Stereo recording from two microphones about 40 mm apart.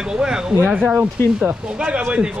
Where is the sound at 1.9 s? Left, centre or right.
Right.